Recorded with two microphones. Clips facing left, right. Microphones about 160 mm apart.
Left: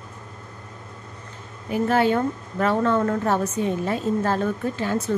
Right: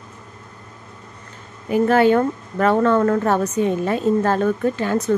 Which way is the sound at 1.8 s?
65° right (ahead or behind).